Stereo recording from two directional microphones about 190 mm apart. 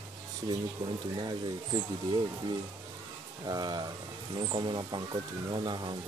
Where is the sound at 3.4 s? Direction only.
20° right (ahead or behind).